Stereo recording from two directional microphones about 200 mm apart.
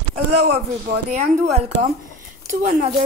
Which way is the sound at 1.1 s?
35° right (ahead or behind).